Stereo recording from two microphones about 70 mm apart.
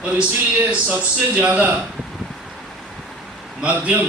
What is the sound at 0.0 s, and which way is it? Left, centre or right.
Speech, centre.